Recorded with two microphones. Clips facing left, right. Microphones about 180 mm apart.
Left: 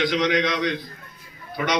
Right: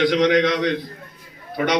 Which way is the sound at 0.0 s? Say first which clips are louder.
Right 5 dB; 60° right (ahead or behind).